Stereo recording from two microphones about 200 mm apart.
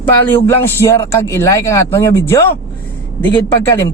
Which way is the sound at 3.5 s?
10° left (ahead or behind).